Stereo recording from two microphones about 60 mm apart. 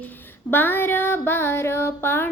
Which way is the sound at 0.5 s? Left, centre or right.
Left.